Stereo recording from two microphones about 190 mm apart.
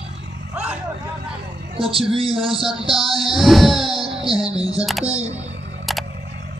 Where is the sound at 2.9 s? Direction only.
Centre (ahead or behind).